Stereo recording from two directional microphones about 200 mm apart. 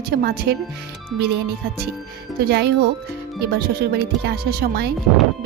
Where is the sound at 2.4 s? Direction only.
55° right (ahead or behind).